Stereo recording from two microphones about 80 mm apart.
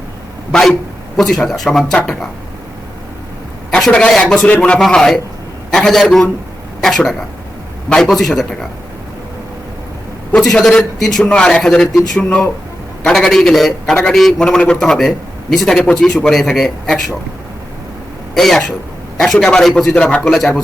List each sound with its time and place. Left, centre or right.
0.5 s a man's voice: centre
3.8 s a man's voice: centre
4.4 s a man's voice: centre
4.8 s a man's voice: centre
10.3 s a man's voice: centre
18.3 s a man's voice: centre